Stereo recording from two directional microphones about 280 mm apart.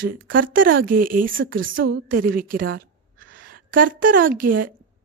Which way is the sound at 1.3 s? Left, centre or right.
Right.